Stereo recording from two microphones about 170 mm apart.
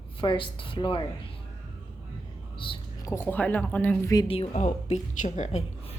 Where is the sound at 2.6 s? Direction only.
30° left (ahead or behind).